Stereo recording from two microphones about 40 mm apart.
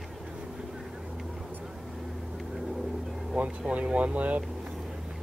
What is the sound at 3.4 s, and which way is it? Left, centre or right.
Speech, right.